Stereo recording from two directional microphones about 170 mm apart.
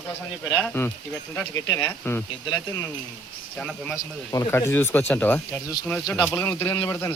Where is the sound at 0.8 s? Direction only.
10° left (ahead or behind).